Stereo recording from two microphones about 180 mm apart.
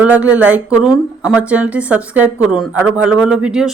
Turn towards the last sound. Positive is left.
turn(degrees=-5)  # may be behind; listen again after turning